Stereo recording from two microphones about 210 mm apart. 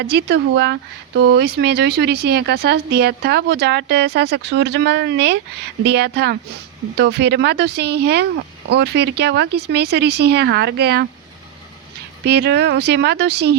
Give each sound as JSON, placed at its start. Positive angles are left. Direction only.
{"t": 0.0, "sound": "speech", "side_deg": -55}
{"t": 12.2, "sound": "speech", "side_deg": -50}